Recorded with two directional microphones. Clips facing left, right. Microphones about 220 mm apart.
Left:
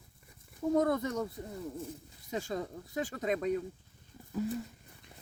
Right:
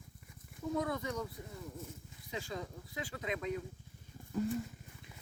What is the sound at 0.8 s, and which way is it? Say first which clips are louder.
Speech: left 7 dB; 45° left (ahead or behind).